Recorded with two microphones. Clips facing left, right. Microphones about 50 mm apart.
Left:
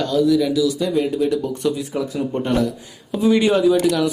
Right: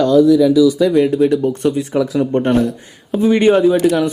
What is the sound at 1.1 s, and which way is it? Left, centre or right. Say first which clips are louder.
Speech: right 6 dB; right.